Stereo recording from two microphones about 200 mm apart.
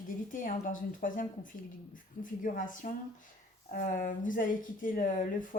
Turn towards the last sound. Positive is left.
turn(degrees=40)  # may be behind; listen again after turning